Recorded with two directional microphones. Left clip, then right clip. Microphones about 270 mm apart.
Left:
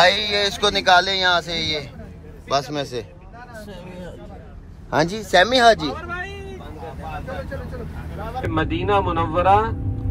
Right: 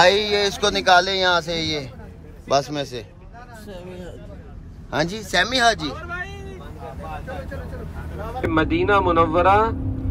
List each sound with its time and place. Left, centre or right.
0.0 s speech: centre
4.9 s speech: centre
5.9 s vehicle: left
8.4 s speech: centre